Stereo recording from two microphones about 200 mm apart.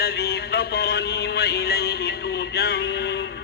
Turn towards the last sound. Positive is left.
turn(degrees=55)  # may be behind; listen again after turning